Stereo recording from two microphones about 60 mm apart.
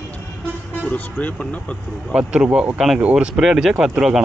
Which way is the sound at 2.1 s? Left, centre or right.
Centre.